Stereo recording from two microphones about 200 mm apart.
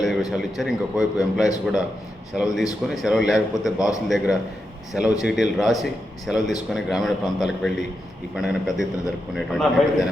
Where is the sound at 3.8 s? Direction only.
15° left (ahead or behind).